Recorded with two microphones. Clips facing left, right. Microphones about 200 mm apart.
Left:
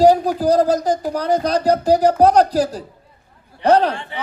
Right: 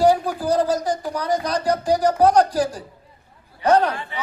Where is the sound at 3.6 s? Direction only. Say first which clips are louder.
Left 3 dB; 35° left (ahead or behind).